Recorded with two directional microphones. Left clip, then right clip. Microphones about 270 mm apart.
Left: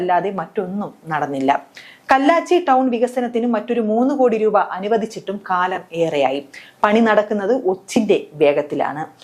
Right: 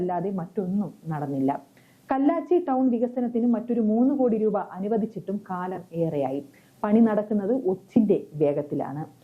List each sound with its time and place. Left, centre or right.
0.0 s a woman's voice: centre
3.8 s a woman's voice: centre